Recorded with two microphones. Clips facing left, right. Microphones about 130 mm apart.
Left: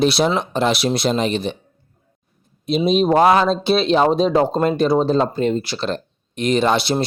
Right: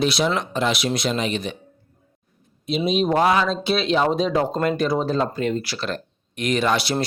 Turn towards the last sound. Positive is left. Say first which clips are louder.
# left 4 dB
turn(degrees=25)  # may be behind; listen again after turning